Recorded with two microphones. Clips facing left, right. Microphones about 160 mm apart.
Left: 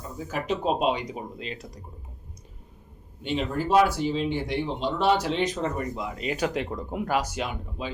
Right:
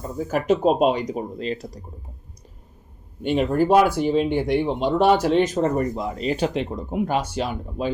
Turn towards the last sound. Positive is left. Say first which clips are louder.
# right 9 dB
turn(degrees=-45)  # may be behind; listen again after turning